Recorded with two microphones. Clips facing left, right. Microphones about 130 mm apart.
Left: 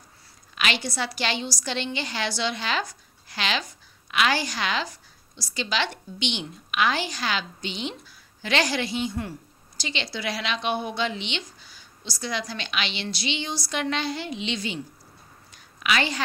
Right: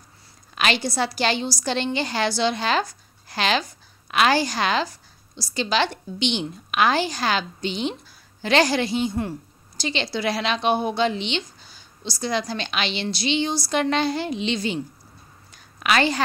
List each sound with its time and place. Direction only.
0.6 s a woman's voice: 35° right (ahead or behind)
15.8 s a woman's voice: 45° right (ahead or behind)